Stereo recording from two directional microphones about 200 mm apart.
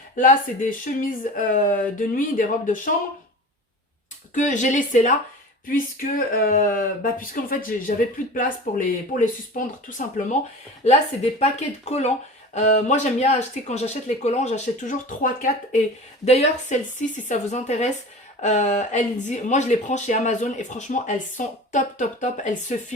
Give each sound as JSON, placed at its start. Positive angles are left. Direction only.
{"t": 0.2, "sound": "speech", "side_deg": 40}
{"t": 4.4, "sound": "speech", "side_deg": 40}
{"t": 11.9, "sound": "speech", "side_deg": 35}